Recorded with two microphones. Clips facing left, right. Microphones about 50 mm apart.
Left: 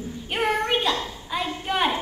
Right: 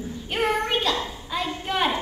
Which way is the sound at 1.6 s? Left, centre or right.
Centre.